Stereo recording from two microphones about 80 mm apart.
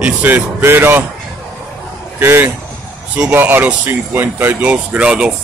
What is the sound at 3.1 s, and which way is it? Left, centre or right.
Speech, centre.